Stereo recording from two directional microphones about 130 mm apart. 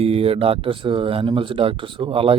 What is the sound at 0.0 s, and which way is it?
Speech, 50° right (ahead or behind).